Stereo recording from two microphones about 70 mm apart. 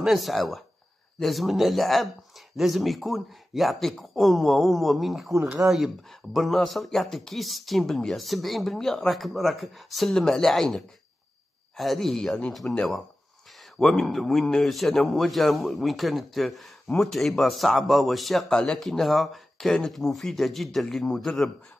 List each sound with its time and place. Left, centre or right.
0.0 s a man's voice: centre
5.6 s speech: right
6.3 s a man's voice: centre
12.6 s speech: centre
13.7 s a man's voice: centre